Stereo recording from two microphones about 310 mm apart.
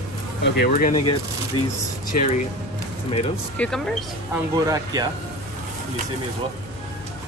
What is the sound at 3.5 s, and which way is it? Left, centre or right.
Speech, centre.